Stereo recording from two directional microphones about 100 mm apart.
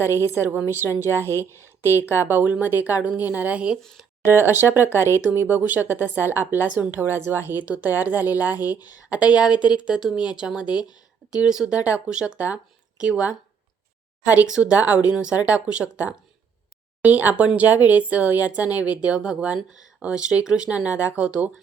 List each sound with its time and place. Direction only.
0.3 s a woman's voice: 25° right (ahead or behind)
1.2 s speech: 25° left (ahead or behind)
2.2 s speech: 20° right (ahead or behind)
4.5 s a woman's voice: 25° right (ahead or behind)
10.7 s speech: 45° left (ahead or behind)
11.4 s speech: 5° right (ahead or behind)